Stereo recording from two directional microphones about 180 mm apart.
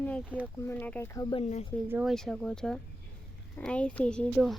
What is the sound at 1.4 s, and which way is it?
Speech, 40° left (ahead or behind).